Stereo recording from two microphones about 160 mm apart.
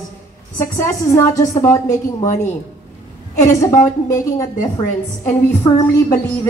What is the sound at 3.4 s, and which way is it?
A woman's voice, 15° left (ahead or behind).